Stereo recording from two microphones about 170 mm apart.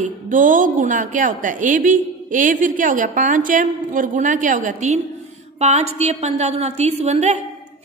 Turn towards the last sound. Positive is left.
turn(degrees=-40)  # may be behind; listen again after turning